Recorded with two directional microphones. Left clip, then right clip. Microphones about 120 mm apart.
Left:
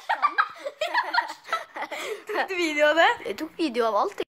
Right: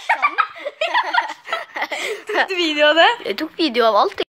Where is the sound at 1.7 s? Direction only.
30° right (ahead or behind).